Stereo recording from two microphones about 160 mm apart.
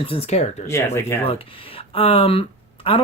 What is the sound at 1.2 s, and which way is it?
Speech, 35° left (ahead or behind).